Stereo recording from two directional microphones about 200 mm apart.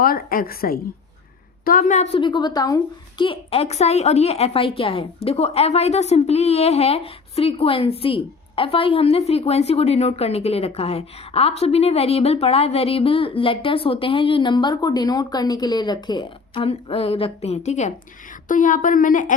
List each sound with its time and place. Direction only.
0.0 s a woman's voice: 45° left (ahead or behind)
1.8 s a woman's voice: 35° left (ahead or behind)